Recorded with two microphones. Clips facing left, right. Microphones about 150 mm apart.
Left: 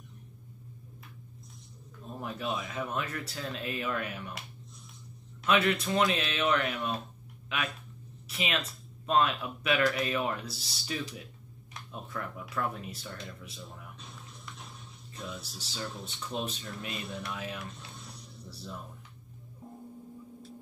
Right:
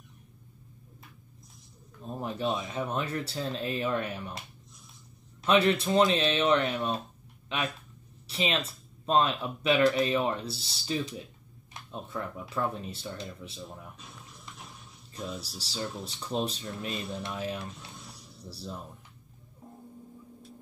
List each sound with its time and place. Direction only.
2.1 s speech: 30° right (ahead or behind)
15.3 s music: centre (ahead or behind)
16.1 s speech: 35° right (ahead or behind)